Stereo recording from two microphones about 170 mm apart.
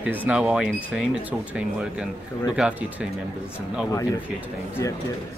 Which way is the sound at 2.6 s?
5° right (ahead or behind).